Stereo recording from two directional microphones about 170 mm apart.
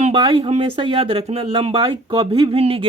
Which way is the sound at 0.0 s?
30° right (ahead or behind).